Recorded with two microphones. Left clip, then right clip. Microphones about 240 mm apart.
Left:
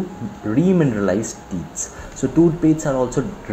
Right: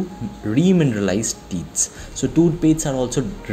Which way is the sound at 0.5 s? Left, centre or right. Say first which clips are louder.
Left 1 dB; right.